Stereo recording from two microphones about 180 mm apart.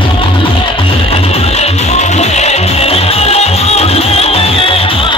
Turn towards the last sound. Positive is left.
turn(degrees=30)  # may be behind; listen again after turning